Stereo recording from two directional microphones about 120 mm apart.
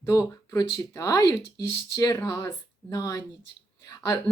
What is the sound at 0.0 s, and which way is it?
A woman's voice, 30° left (ahead or behind).